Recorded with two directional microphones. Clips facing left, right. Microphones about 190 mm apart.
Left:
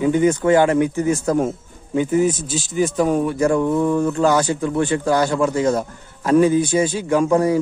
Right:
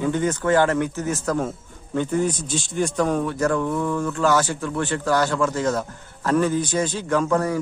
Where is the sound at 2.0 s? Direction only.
5° left (ahead or behind).